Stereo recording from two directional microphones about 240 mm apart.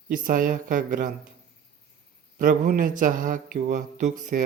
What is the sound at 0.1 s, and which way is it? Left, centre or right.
Speech, right.